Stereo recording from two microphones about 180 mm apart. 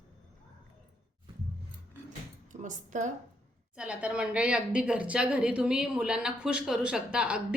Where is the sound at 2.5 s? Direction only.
45° right (ahead or behind).